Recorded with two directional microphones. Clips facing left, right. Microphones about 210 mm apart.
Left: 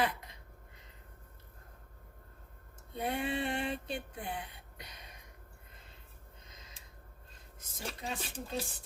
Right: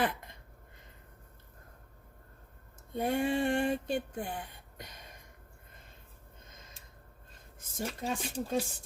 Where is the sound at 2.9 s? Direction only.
45° right (ahead or behind).